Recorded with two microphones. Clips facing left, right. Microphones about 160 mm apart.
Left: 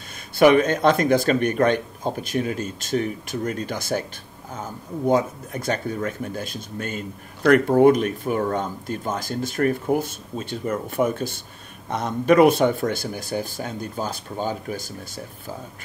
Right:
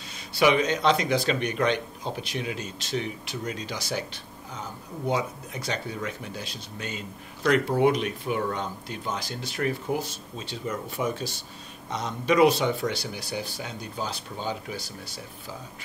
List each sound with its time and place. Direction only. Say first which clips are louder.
0.1 s speech: left 7 dB; 50° left (ahead or behind)